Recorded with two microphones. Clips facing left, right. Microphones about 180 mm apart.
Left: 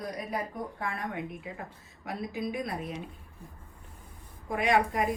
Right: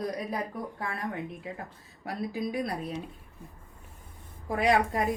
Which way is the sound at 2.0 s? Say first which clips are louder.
Right 2 dB; 35° right (ahead or behind).